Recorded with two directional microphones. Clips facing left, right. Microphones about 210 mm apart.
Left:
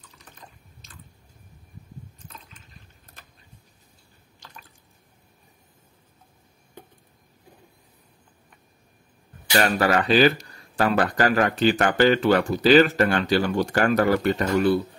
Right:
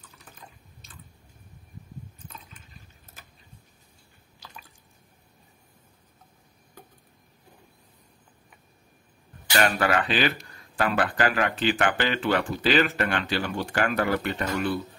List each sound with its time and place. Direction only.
0.0 s water: 5° right (ahead or behind)
9.6 s speech: 40° left (ahead or behind)